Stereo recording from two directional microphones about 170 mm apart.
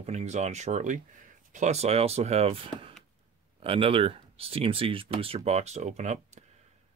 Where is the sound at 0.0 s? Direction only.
40° right (ahead or behind).